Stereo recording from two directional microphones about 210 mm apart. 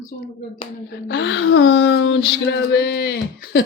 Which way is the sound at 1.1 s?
55° left (ahead or behind).